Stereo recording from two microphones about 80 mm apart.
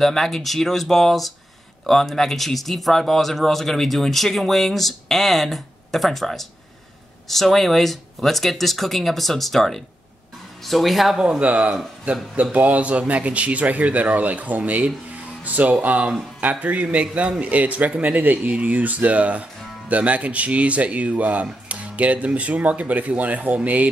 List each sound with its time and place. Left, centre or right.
0.0 s speech: centre